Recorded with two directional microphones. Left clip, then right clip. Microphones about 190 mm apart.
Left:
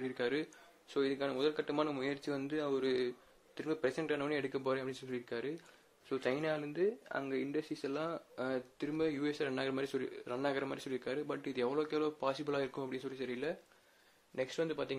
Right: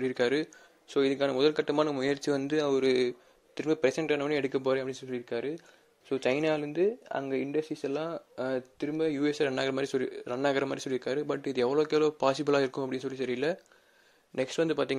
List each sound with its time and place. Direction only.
0.0 s speech: 30° right (ahead or behind)